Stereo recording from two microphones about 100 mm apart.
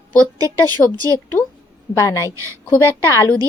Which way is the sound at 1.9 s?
30° left (ahead or behind).